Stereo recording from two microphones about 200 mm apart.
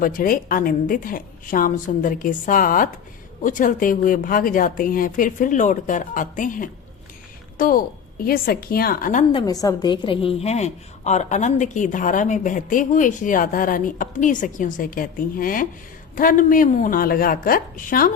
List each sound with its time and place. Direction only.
0.0 s a woman's voice: 45° left (ahead or behind)
9.3 s a woman's voice: 15° left (ahead or behind); by 18.1 s 45° left (ahead or behind)